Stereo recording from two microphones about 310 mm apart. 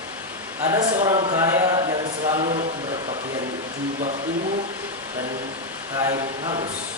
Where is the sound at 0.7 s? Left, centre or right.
Centre.